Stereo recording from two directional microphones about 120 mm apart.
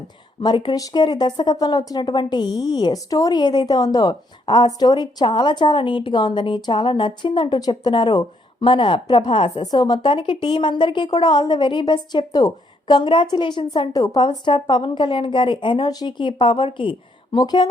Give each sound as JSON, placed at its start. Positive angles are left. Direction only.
{"t": 0.4, "sound": "speech", "side_deg": 40}
{"t": 14.0, "sound": "speech", "side_deg": 30}
{"t": 14.3, "sound": "speech", "side_deg": 40}